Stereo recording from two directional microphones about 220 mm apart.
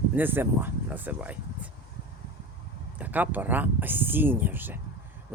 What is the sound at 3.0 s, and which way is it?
Speech, 5° right (ahead or behind).